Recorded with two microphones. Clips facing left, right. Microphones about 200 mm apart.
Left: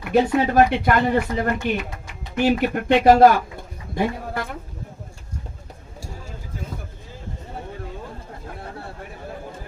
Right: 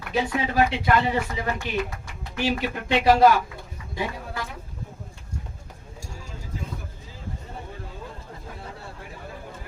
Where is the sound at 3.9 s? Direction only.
55° left (ahead or behind).